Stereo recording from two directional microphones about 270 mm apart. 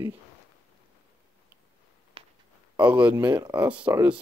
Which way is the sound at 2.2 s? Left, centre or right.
Right.